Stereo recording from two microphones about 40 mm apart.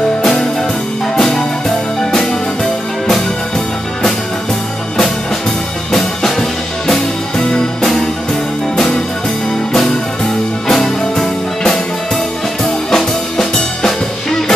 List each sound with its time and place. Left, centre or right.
0.2 s music: centre
5.9 s music: centre
6.9 s music: centre
9.7 s music: centre